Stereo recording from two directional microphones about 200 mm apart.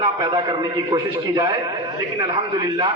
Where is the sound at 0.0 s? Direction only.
20° right (ahead or behind).